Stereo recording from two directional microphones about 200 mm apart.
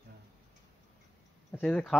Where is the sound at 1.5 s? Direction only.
5° left (ahead or behind).